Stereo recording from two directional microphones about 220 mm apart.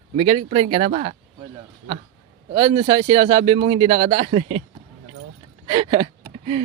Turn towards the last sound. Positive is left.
turn(degrees=-25)  # may be behind; listen again after turning